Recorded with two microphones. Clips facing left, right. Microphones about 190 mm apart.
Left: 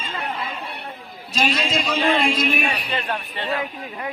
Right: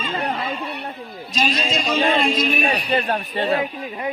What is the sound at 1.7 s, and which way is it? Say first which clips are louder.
A man's voice: right 2 dB; 30° right (ahead or behind).